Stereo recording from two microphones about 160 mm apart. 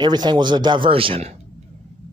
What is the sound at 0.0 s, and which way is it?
Speech, 25° right (ahead or behind).